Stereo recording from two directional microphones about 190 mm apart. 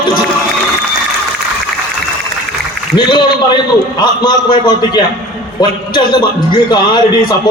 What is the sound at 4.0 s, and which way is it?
A man's voice, 25° left (ahead or behind).